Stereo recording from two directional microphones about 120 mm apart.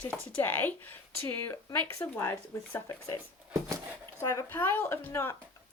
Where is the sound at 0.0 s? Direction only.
15° left (ahead or behind).